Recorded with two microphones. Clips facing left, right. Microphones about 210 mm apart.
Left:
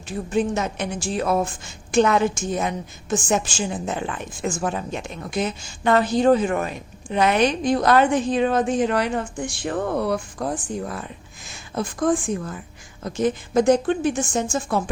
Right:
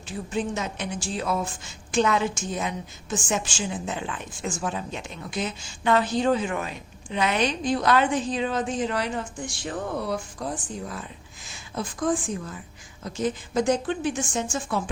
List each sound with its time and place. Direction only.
0.3 s a woman's voice: 55° left (ahead or behind)